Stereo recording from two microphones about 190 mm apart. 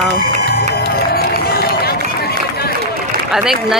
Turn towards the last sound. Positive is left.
turn(degrees=-5)  # may be behind; listen again after turning